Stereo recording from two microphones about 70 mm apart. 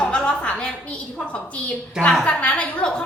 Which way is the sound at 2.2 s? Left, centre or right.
Centre.